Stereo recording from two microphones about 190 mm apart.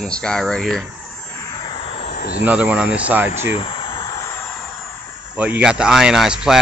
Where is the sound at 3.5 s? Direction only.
30° left (ahead or behind).